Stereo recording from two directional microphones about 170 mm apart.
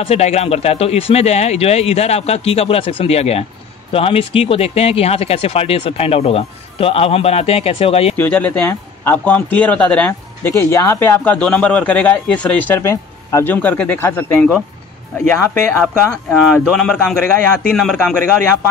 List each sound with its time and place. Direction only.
0.0 s speech: 40° left (ahead or behind)
8.2 s a man's voice: 10° left (ahead or behind)
15.8 s a man's voice: 5° left (ahead or behind)